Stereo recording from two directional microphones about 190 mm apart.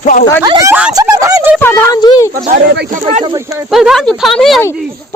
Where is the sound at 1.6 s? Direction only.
15° left (ahead or behind).